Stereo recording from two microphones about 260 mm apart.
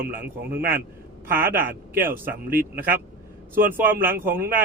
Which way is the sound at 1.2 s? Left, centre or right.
Centre.